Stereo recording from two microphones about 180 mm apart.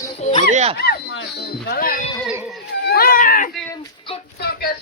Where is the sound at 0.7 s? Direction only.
60° left (ahead or behind).